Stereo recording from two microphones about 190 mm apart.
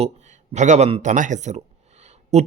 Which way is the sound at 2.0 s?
35° right (ahead or behind).